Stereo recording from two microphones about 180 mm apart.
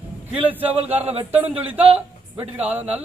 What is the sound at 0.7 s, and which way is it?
Speech, 35° right (ahead or behind).